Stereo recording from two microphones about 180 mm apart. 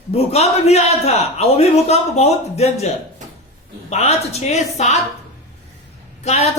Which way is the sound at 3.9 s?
35° left (ahead or behind).